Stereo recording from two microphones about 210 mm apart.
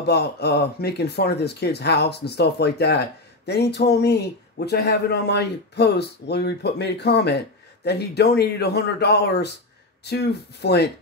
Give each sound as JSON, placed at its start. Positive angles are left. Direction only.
{"t": 0.0, "sound": "speech", "side_deg": 50}